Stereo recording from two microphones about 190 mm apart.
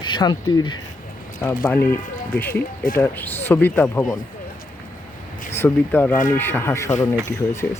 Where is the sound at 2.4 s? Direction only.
10° left (ahead or behind).